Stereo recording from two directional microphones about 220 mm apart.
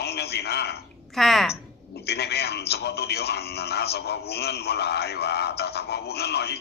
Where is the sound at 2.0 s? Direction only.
45° left (ahead or behind).